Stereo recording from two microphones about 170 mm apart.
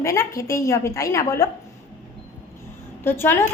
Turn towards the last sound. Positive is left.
turn(degrees=15)  # may be behind; listen again after turning